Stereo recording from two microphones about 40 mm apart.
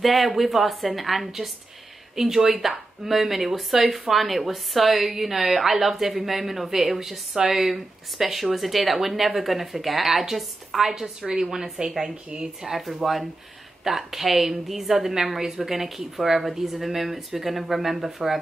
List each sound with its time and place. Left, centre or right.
0.0 s a woman's voice: centre; by 12.4 s right
12.6 s a woman's voice: centre